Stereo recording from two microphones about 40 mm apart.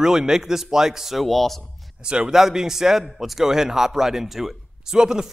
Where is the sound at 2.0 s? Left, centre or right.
Right.